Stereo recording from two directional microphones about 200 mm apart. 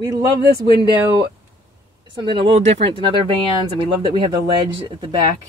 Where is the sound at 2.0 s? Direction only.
25° right (ahead or behind).